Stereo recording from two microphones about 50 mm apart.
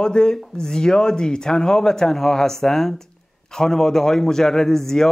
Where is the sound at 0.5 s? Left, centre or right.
Centre.